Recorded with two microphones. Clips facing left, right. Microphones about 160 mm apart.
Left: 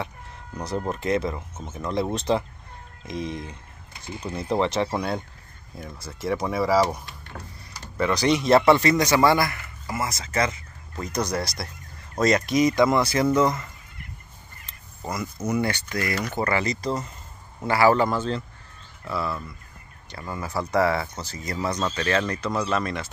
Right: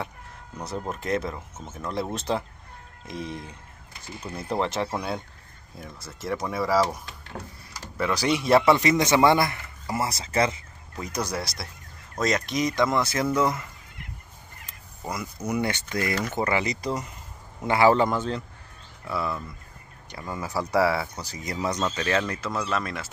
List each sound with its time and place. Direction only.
0.6 s speech: 5° right (ahead or behind)
8.0 s speech: 5° right (ahead or behind)
9.0 s speech: 25° right (ahead or behind)
11.0 s speech: 10° right (ahead or behind)
15.0 s speech: 10° right (ahead or behind)